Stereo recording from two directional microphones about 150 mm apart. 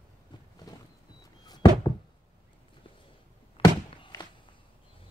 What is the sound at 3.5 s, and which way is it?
Thunk, 35° left (ahead or behind).